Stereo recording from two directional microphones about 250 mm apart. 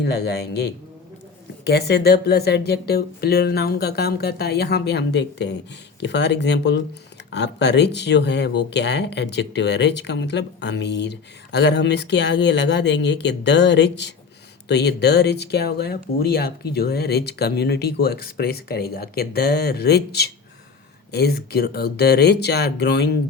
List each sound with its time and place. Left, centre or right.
0.0 s speech: left